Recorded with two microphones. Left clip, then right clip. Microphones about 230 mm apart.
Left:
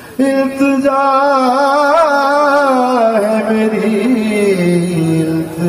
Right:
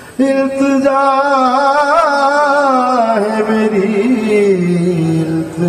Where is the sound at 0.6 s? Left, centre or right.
Left.